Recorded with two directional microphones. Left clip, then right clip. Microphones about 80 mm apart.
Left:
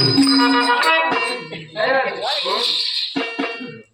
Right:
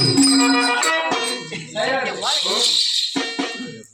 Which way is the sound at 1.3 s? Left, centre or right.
Right.